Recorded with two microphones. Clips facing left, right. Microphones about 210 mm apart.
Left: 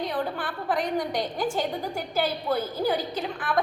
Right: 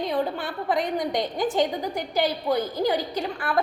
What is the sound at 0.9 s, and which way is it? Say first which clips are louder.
A woman's voice: right 2 dB; 20° right (ahead or behind).